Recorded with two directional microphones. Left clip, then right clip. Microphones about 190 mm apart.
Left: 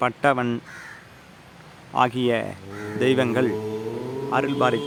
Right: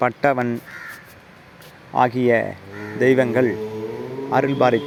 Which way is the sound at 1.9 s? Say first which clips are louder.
Right 4 dB; 10° right (ahead or behind).